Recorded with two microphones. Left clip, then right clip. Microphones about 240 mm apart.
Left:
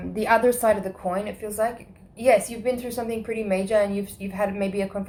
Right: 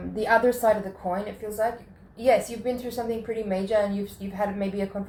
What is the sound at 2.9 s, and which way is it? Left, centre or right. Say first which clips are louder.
A woman's voice: left 1 dB; left.